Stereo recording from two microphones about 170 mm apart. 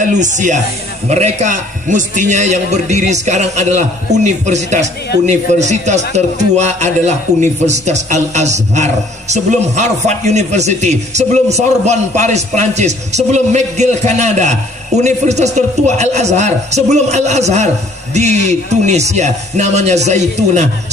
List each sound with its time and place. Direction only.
0.0 s speech: 45° right (ahead or behind)